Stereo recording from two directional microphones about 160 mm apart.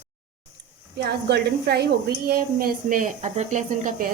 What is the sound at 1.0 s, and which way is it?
A woman's voice, 90° right.